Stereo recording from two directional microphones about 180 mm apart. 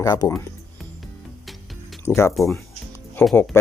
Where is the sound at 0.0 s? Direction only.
20° left (ahead or behind).